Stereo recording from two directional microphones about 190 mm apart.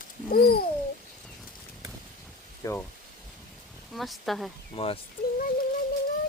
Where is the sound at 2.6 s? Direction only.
15° left (ahead or behind).